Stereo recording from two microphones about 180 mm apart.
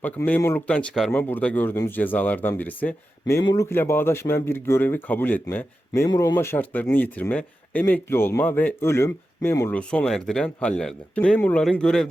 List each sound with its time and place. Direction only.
0.0 s speech: 10° left (ahead or behind)